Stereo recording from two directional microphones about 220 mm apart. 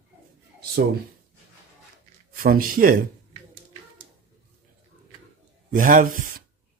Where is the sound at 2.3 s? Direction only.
40° right (ahead or behind).